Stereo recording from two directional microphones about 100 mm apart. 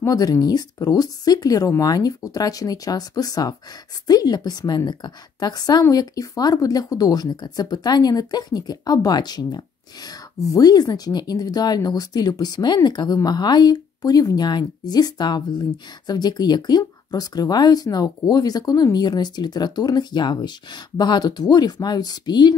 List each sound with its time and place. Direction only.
0.0 s a woman's voice: 40° left (ahead or behind)